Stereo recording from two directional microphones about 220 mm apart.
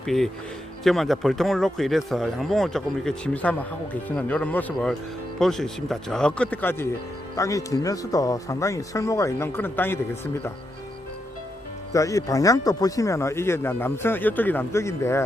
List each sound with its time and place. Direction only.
0.0 s speech: centre (ahead or behind)
11.9 s speech: 15° left (ahead or behind)